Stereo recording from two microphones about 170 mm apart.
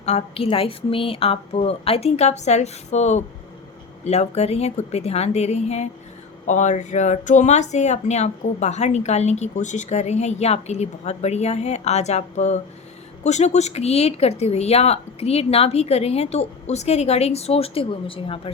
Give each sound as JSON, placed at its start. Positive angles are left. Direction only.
{"t": 0.0, "sound": "speech", "side_deg": 35}